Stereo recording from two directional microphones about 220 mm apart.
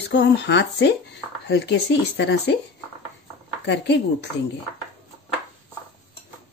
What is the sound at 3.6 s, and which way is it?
Speech, 50° left (ahead or behind).